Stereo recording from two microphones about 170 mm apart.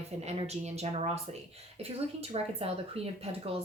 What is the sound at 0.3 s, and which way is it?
Speech, 40° right (ahead or behind).